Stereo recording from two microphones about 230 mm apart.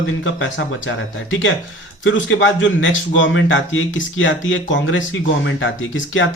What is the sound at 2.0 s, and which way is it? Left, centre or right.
A man's voice, left.